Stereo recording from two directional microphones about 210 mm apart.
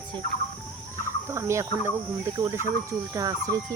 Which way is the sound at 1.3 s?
15° right (ahead or behind).